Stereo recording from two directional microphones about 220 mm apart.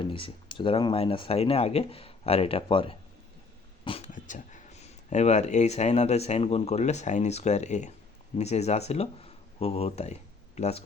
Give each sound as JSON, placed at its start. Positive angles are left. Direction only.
{"t": 0.0, "sound": "speech", "side_deg": 20}